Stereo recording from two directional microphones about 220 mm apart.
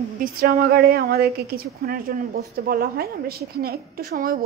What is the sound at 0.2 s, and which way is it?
A woman's voice, 45° right (ahead or behind).